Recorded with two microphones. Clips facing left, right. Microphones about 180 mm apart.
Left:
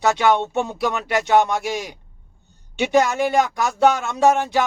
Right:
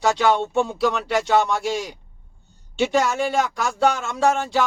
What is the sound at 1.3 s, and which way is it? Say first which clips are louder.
Speech: left 3 dB; 20° left (ahead or behind).